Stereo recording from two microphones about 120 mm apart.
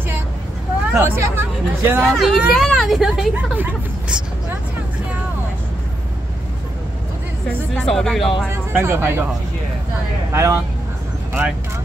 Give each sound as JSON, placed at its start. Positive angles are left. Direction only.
{"t": 0.9, "sound": "speech", "side_deg": -20}
{"t": 2.0, "sound": "speech", "side_deg": 0}
{"t": 3.3, "sound": "speech", "side_deg": -15}
{"t": 7.7, "sound": "speech", "side_deg": 5}
{"t": 8.7, "sound": "speech", "side_deg": -20}
{"t": 10.3, "sound": "speech", "side_deg": -25}